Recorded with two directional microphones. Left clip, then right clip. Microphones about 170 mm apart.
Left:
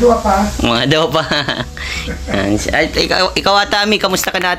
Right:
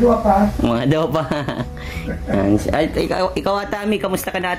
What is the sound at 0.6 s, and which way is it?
Speech, 5° right (ahead or behind).